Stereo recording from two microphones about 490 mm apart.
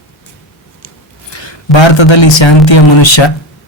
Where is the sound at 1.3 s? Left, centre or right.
Left.